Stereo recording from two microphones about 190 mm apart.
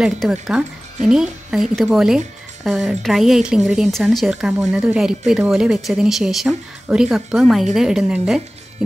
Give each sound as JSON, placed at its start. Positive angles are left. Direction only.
{"t": 0.0, "sound": "speech", "side_deg": -5}